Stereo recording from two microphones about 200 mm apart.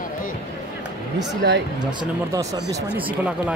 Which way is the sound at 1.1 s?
60° right (ahead or behind).